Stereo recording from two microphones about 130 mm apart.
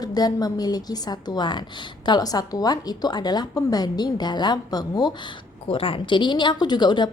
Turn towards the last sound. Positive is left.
turn(degrees=35)  # may be behind; listen again after turning